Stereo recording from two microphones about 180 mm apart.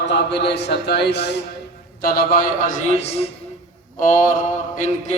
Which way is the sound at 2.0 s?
55° left (ahead or behind).